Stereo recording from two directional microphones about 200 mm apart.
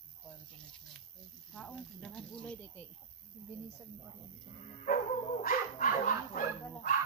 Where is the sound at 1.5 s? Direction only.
5° left (ahead or behind).